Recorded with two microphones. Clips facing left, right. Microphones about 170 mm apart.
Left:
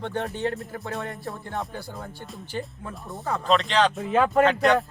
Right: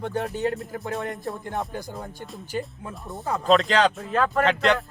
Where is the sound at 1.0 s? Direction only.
20° right (ahead or behind).